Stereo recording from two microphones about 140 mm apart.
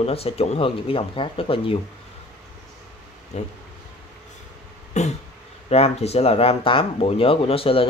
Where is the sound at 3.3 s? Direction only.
55° left (ahead or behind).